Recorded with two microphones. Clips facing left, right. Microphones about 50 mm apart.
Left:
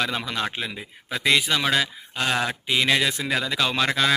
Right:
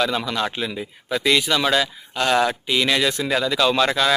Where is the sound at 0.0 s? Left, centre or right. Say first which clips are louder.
Right 4 dB; left.